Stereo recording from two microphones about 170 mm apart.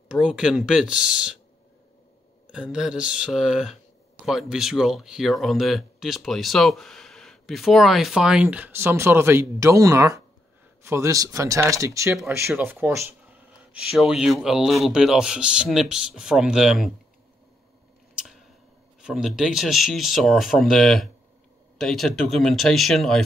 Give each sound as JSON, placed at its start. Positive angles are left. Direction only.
{"t": 0.2, "sound": "speech", "side_deg": -5}
{"t": 2.5, "sound": "speech", "side_deg": -5}
{"t": 18.1, "sound": "scissors", "side_deg": 0}
{"t": 19.0, "sound": "speech", "side_deg": -5}